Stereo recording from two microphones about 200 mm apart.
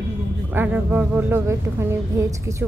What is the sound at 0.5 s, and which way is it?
A woman's voice, 10° right (ahead or behind).